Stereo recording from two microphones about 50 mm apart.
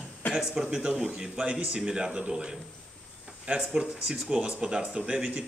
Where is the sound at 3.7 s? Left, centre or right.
Centre.